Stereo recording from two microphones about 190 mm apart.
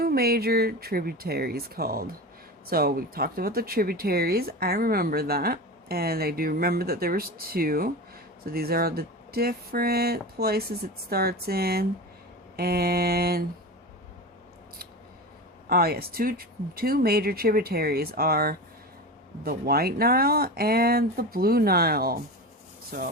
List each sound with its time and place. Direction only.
0.0 s speech: 55° right (ahead or behind)
12.5 s mantra: 55° right (ahead or behind)
15.7 s speech: 55° right (ahead or behind)